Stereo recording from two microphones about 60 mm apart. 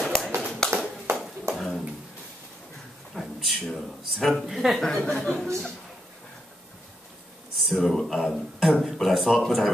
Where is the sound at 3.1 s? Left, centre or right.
Centre.